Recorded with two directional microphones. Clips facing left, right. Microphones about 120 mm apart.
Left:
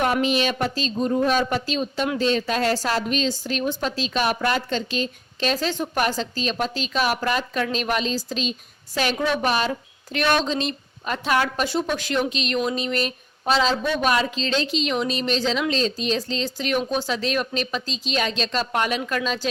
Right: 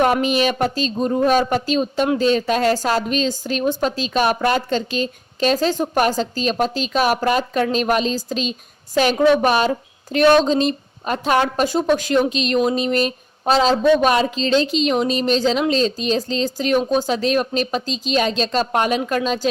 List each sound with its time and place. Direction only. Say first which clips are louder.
0.0 s speech: right 4 dB; 35° right (ahead or behind)